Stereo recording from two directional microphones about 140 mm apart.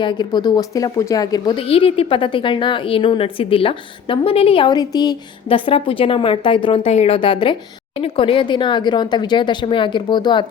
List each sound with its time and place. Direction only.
0.0 s speech: 30° left (ahead or behind)
1.6 s a woman's voice: 45° left (ahead or behind)